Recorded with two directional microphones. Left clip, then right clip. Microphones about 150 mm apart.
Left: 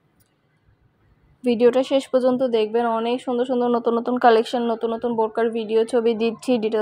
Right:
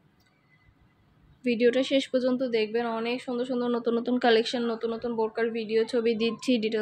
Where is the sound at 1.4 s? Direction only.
40° left (ahead or behind).